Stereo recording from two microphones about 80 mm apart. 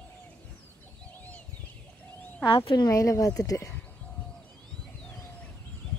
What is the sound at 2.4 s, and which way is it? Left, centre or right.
Speech, left.